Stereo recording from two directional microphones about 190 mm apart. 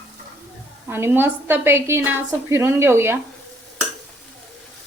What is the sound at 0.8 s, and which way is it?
A woman's voice, 10° right (ahead or behind).